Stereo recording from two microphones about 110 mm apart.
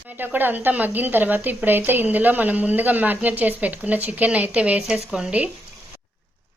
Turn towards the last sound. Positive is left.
turn(degrees=-10)  # may be behind; listen again after turning